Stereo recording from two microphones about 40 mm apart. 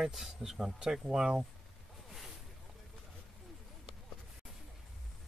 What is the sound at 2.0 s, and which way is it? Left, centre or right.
Zipper, centre.